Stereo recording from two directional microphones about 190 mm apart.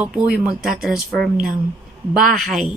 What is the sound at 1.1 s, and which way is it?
Speech, 50° right (ahead or behind).